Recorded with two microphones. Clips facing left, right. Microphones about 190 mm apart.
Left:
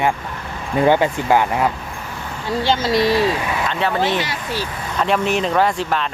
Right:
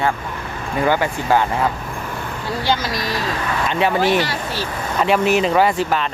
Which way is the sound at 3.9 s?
20° left (ahead or behind).